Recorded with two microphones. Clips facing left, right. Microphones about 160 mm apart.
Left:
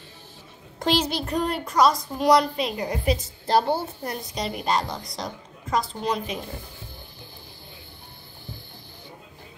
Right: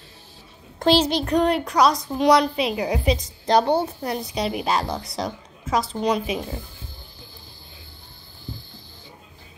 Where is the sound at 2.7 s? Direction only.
90° right.